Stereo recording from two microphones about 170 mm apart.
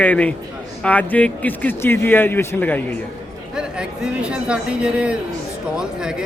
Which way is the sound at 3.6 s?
5° right (ahead or behind).